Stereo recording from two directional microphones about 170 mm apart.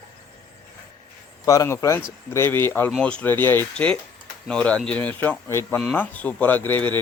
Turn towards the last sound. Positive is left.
turn(degrees=10)  # may be behind; listen again after turning